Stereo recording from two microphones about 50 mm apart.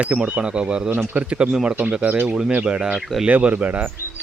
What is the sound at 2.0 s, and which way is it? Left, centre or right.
Speech, right.